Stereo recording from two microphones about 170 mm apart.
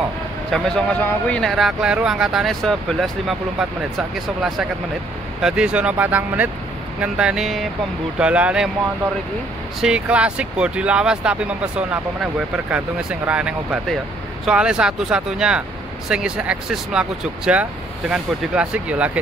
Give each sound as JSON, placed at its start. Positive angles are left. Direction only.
{"t": 0.5, "sound": "speech", "side_deg": 5}
{"t": 9.8, "sound": "speech", "side_deg": -5}